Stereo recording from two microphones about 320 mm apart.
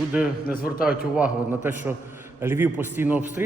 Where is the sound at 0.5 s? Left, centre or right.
Left.